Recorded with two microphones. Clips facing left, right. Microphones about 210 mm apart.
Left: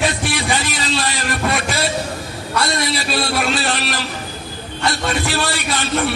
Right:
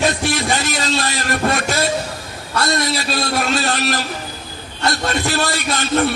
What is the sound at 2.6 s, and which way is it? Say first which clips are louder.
A man's voice: right 2 dB; 45° right (ahead or behind).